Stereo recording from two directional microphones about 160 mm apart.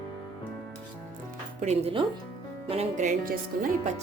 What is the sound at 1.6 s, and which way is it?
Speech, 35° right (ahead or behind).